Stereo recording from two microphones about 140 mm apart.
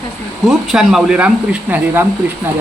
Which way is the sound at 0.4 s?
5° right (ahead or behind).